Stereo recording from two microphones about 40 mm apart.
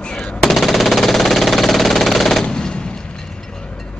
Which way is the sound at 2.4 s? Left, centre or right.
Left.